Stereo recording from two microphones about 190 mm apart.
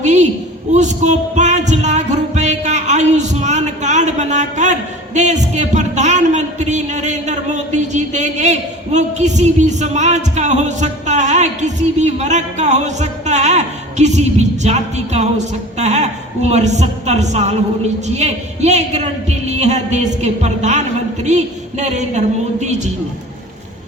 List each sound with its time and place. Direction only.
0.0 s a sound: 40° right (ahead or behind)
0.7 s music: 40° right (ahead or behind)
15.8 s a woman's voice: 35° right (ahead or behind)